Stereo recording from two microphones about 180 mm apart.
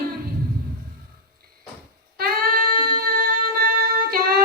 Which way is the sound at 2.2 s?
50° right (ahead or behind).